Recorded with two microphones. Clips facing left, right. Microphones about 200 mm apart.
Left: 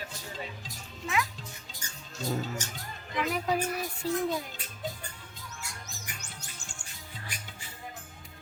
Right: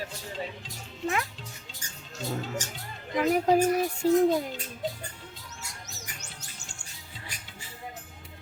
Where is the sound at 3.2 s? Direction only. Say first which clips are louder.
Right 7 dB; 45° right (ahead or behind).